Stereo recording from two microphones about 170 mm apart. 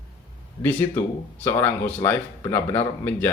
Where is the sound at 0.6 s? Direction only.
10° left (ahead or behind).